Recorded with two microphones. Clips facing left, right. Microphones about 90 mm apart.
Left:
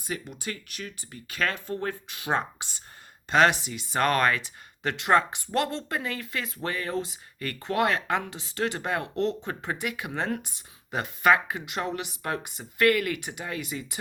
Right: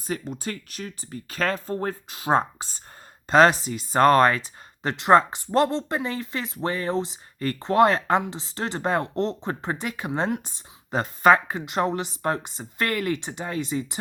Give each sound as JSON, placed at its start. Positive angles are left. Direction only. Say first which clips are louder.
{"t": 0.0, "sound": "speech", "louder": "right 5 dB", "side_deg": -35}